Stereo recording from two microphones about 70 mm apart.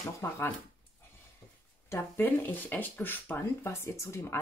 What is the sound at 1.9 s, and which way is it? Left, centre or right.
Speech, left.